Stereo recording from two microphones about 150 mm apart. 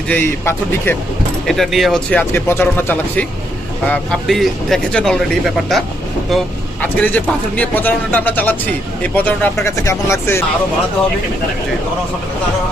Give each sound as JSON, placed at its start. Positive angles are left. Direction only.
{"t": 0.1, "sound": "speech", "side_deg": 15}
{"t": 1.5, "sound": "speech", "side_deg": 0}
{"t": 6.8, "sound": "speech", "side_deg": 10}